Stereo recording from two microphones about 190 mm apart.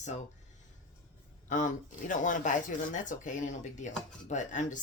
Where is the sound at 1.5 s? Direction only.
40° left (ahead or behind).